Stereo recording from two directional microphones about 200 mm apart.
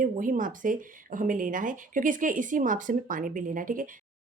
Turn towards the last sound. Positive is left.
turn(degrees=-45)  # may be behind; listen again after turning